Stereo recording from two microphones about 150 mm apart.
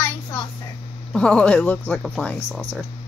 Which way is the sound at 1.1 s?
5° left (ahead or behind).